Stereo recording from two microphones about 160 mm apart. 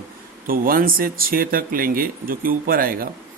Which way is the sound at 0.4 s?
65° right (ahead or behind).